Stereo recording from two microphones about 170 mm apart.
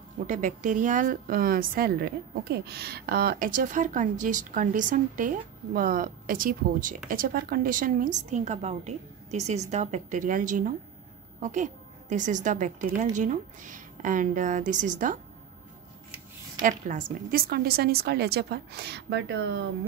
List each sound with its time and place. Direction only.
0.3 s a woman's voice: 50° right (ahead or behind)
16.6 s a woman's voice: 50° right (ahead or behind); by 19.7 s 85° right